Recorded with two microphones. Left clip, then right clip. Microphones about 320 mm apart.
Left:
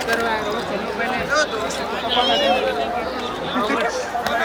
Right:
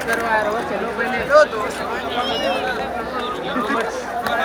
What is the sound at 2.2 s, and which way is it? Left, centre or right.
Speech, left.